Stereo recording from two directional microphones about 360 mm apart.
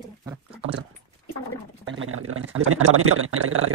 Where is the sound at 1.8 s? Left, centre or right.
Right.